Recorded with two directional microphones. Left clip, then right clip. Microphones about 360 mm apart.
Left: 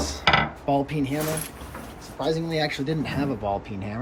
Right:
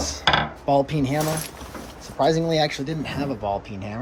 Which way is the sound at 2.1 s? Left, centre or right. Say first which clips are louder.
Right 6 dB; right.